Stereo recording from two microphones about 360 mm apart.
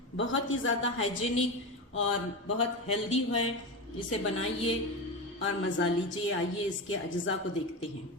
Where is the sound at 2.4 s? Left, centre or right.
Left.